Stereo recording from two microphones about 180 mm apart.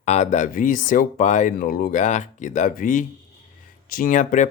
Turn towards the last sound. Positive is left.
turn(degrees=45)  # may be behind; listen again after turning